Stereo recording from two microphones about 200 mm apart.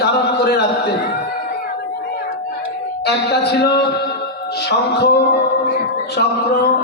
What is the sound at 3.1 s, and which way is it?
Speech, 55° left (ahead or behind).